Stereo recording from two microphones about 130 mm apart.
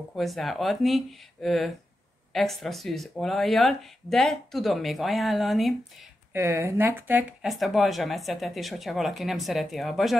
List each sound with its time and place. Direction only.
0.1 s speech: centre (ahead or behind)
6.3 s speech: 20° right (ahead or behind)
7.4 s speech: centre (ahead or behind)